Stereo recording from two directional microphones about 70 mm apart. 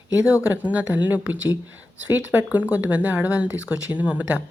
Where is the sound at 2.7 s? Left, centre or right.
Right.